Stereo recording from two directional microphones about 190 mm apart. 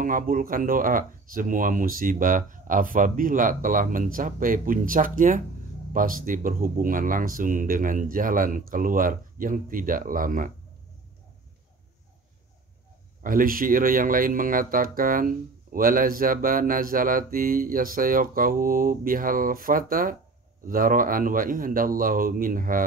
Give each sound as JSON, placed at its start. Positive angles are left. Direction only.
{"t": 0.0, "sound": "speech", "side_deg": -45}
{"t": 13.2, "sound": "speech", "side_deg": -45}